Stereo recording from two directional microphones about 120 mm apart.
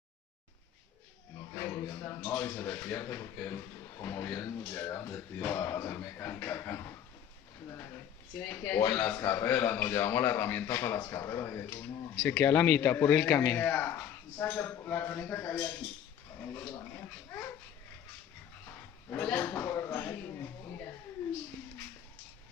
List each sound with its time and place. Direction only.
1.5 s speech: 20° left (ahead or behind)
8.4 s a man's voice: 20° left (ahead or behind)
19.0 s a man's voice: 15° left (ahead or behind)